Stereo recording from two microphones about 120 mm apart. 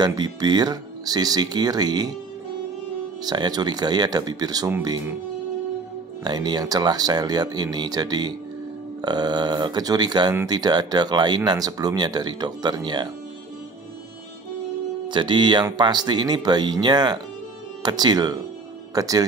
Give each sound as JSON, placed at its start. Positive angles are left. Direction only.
{"t": 0.0, "sound": "speech", "side_deg": -35}
{"t": 3.3, "sound": "speech", "side_deg": -35}
{"t": 6.2, "sound": "speech", "side_deg": -35}
{"t": 15.0, "sound": "speech", "side_deg": -40}